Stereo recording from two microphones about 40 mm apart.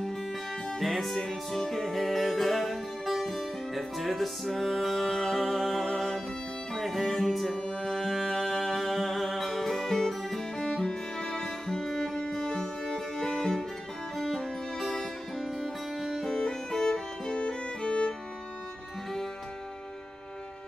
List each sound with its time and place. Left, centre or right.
0.7 s music: centre; by 18.1 s left